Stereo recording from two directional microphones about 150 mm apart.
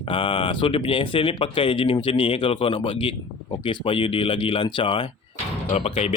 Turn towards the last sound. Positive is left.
turn(degrees=45)  # may be behind; listen again after turning